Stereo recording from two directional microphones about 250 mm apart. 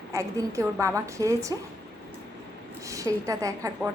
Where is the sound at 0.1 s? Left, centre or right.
Centre.